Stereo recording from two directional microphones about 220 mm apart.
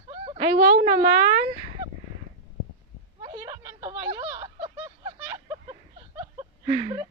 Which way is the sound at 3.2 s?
20° right (ahead or behind).